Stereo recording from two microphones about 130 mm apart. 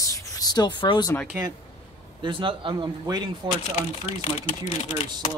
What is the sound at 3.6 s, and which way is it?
Speech, 55° left (ahead or behind).